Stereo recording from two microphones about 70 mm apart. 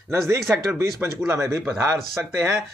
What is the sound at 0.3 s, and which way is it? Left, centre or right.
Speech, right.